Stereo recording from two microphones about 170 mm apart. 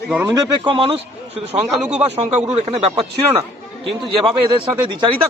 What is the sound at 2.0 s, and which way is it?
Speech, 40° right (ahead or behind).